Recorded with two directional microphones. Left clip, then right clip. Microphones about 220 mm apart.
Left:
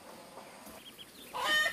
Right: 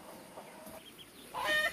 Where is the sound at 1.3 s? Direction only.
50° left (ahead or behind).